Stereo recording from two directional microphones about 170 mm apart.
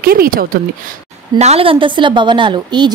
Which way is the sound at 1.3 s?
40° right (ahead or behind).